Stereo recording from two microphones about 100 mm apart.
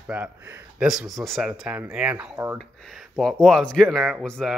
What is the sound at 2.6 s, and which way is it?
Speech, centre (ahead or behind).